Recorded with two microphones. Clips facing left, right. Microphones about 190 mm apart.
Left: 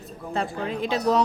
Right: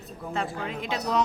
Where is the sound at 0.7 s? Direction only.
35° left (ahead or behind).